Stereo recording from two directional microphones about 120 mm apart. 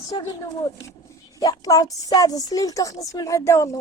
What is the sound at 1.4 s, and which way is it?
A woman's voice, 30° left (ahead or behind).